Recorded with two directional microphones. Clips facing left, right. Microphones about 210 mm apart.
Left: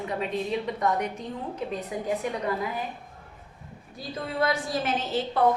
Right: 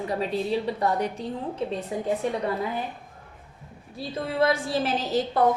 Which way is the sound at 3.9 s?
30° right (ahead or behind).